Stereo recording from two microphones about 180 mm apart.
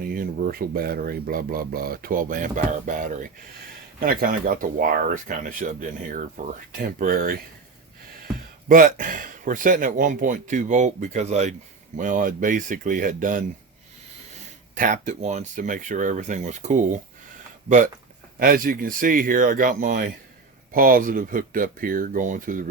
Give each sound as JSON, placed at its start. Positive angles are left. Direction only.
{"t": 0.0, "sound": "speech", "side_deg": -55}
{"t": 8.7, "sound": "speech", "side_deg": -50}
{"t": 14.8, "sound": "speech", "side_deg": -45}
{"t": 18.3, "sound": "speech", "side_deg": -55}